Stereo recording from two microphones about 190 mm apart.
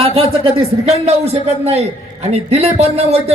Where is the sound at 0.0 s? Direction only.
30° right (ahead or behind).